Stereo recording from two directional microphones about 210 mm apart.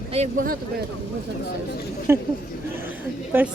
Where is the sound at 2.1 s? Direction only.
10° right (ahead or behind).